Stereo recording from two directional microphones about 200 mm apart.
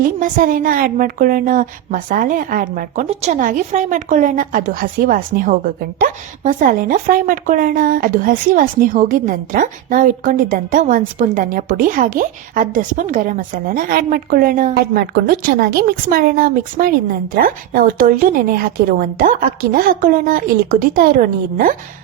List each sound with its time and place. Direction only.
0.0 s speech: 45° right (ahead or behind)